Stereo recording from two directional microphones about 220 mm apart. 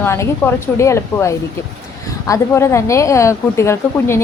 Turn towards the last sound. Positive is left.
turn(degrees=10)  # may be behind; listen again after turning